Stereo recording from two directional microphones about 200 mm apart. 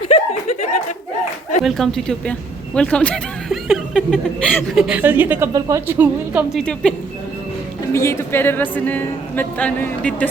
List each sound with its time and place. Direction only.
0.1 s chuckle: 35° left (ahead or behind)
1.6 s speech: centre (ahead or behind)
6.6 s speech: 5° left (ahead or behind)
7.9 s speech: 15° left (ahead or behind)